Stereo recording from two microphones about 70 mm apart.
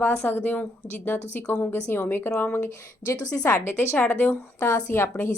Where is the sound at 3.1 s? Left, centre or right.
Left.